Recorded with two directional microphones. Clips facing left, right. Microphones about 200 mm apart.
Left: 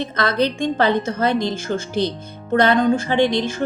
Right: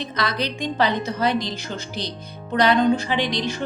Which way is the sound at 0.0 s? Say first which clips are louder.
Left 6 dB; 55° left (ahead or behind).